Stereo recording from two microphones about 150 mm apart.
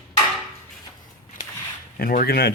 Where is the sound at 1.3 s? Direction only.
65° left (ahead or behind).